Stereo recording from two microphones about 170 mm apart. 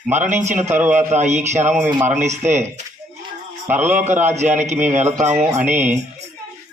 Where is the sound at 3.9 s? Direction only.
45° right (ahead or behind).